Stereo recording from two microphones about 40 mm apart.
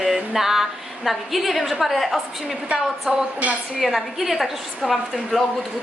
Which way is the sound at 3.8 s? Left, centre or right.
Centre.